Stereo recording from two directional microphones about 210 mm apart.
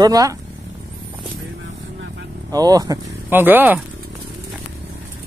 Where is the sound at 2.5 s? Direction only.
20° right (ahead or behind).